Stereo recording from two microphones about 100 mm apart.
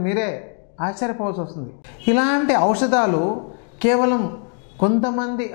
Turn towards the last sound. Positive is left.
turn(degrees=15)  # may be behind; listen again after turning